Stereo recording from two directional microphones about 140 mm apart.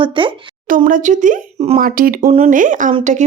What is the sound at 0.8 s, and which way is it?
Speech, 70° right (ahead or behind).